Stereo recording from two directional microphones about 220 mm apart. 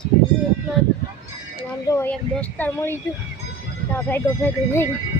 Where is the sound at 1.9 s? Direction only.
10° left (ahead or behind).